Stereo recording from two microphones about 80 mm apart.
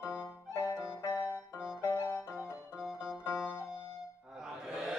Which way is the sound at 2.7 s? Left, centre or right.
Centre.